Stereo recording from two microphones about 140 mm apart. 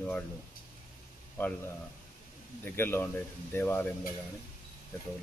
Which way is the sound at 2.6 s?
15° left (ahead or behind).